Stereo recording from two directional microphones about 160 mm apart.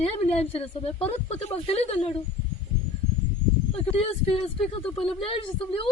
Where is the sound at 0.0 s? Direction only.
40° left (ahead or behind).